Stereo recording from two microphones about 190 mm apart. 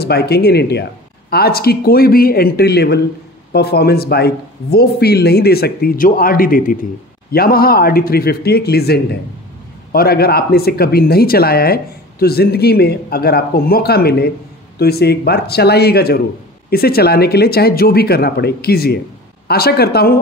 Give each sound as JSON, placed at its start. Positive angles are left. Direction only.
{"t": 0.0, "sound": "speech", "side_deg": 55}